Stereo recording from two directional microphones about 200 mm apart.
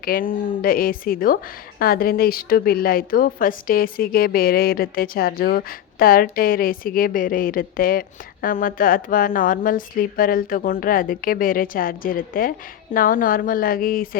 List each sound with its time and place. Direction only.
0.0 s a woman's voice: 45° left (ahead or behind)